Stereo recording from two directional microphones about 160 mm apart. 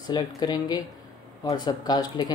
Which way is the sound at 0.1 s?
25° left (ahead or behind).